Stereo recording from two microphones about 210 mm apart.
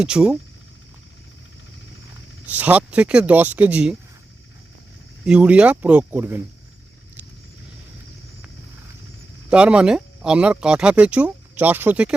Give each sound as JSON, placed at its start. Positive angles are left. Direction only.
{"t": 0.0, "sound": "speech", "side_deg": -5}
{"t": 2.5, "sound": "speech", "side_deg": -10}
{"t": 5.2, "sound": "speech", "side_deg": -5}
{"t": 9.5, "sound": "speech", "side_deg": -5}